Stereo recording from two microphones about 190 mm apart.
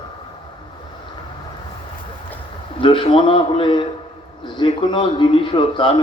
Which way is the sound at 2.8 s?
25° left (ahead or behind).